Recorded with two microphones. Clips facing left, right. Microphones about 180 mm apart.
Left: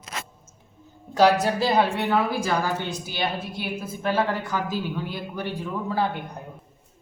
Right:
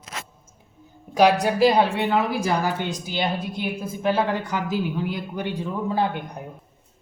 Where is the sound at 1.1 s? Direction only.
15° right (ahead or behind).